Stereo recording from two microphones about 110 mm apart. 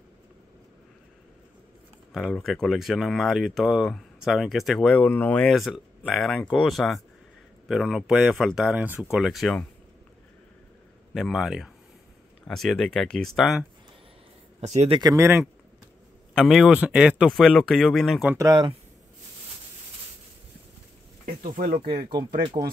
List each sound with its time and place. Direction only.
2.3 s speech: 5° left (ahead or behind)
5.5 s speech: centre (ahead or behind)
11.1 s speech: centre (ahead or behind)
14.6 s speech: 80° right
15.1 s speech: 20° right (ahead or behind)
16.3 s speech: centre (ahead or behind)
18.4 s speech: 35° right (ahead or behind)
21.8 s speech: 55° right (ahead or behind)